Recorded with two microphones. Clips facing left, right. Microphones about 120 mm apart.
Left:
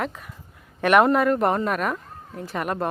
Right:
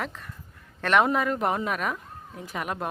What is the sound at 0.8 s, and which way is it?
Speech, 10° left (ahead or behind).